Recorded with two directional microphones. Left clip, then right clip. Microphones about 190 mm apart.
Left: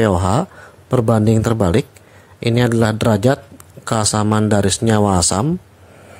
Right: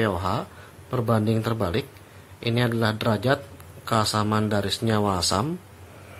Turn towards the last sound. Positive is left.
turn(degrees=50)  # may be behind; listen again after turning